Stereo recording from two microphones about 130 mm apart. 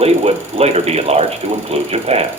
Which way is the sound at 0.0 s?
55° right (ahead or behind).